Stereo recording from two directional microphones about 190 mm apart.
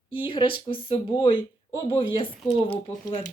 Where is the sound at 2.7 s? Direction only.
15° left (ahead or behind).